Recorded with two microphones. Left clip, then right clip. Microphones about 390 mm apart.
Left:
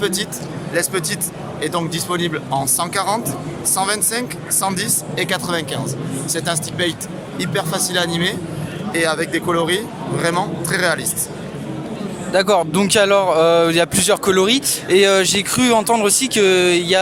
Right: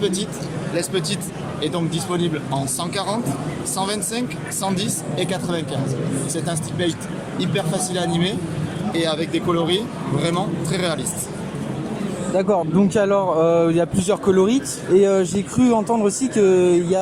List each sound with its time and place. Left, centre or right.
0.0 s speech: left
12.5 s speech: left
14.5 s speech: left